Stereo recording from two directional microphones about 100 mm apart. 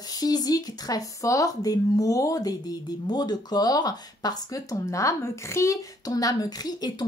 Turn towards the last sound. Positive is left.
turn(degrees=40)  # may be behind; listen again after turning